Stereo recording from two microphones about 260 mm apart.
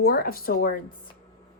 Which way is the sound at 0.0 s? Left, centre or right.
Left.